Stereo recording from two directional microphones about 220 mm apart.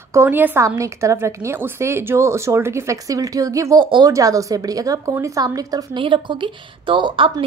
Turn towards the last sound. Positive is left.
turn(degrees=-20)  # may be behind; listen again after turning